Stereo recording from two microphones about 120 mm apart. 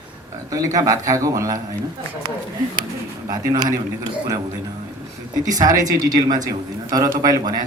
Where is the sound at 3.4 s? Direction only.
30° right (ahead or behind).